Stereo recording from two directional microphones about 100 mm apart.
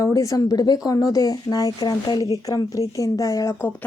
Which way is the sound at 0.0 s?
35° left (ahead or behind).